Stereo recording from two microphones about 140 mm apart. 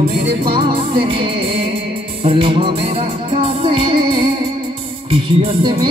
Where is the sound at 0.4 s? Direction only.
40° right (ahead or behind).